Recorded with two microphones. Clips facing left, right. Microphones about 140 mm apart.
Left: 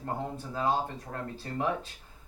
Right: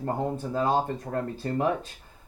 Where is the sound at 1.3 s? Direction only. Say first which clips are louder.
Right 3 dB; 45° right (ahead or behind).